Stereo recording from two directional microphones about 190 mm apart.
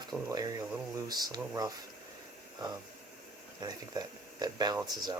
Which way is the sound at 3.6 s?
20° right (ahead or behind).